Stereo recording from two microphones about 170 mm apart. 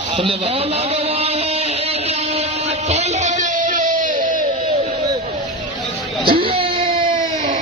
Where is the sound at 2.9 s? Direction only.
45° right (ahead or behind).